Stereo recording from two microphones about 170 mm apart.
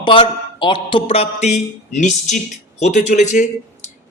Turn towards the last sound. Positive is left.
turn(degrees=45)  # may be behind; listen again after turning